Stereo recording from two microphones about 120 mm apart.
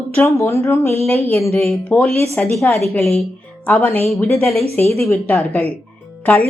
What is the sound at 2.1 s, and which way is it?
Speech, 60° right (ahead or behind).